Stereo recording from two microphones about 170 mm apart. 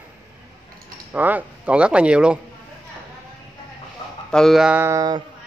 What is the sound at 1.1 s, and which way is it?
Speech, 10° right (ahead or behind).